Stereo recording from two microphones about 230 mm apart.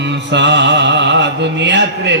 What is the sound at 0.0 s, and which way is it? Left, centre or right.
Music, right.